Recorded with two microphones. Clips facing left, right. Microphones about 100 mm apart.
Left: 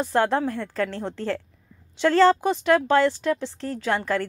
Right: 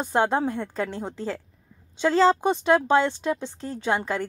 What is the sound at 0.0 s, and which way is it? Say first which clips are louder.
A woman's voice: left 1 dB; 20° right (ahead or behind).